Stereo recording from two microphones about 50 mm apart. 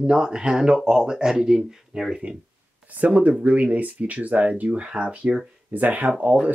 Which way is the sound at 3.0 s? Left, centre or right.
Right.